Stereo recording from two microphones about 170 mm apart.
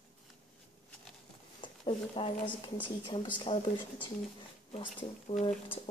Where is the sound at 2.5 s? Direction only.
25° left (ahead or behind).